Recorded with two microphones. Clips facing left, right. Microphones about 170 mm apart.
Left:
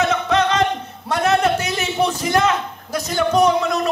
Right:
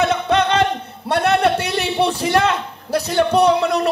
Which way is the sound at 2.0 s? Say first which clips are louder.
Right 1 dB; 30° right (ahead or behind).